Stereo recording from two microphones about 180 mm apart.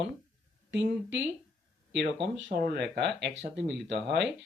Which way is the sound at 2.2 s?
70° right (ahead or behind).